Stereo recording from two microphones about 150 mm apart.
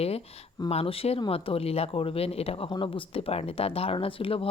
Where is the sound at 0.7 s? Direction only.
40° left (ahead or behind).